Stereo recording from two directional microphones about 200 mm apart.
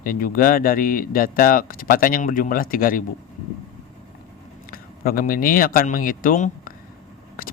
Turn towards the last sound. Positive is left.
turn(degrees=45)  # may be behind; listen again after turning